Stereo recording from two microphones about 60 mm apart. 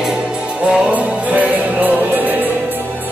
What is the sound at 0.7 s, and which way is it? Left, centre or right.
Music, centre.